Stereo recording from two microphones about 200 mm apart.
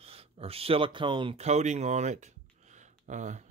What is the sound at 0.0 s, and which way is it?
Speech, 30° right (ahead or behind).